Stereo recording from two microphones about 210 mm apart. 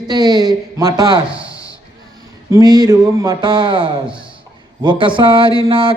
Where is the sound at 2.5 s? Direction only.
15° right (ahead or behind).